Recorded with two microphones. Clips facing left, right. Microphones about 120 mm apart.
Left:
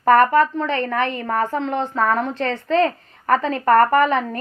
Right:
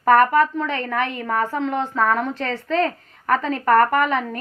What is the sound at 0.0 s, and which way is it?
A woman's voice, 5° right (ahead or behind).